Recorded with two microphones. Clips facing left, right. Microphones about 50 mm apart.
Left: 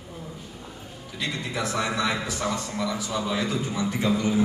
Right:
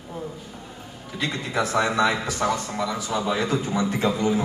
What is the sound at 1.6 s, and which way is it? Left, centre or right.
A man's voice, right.